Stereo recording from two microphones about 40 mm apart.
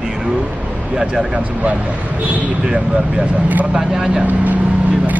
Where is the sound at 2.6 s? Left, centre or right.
Right.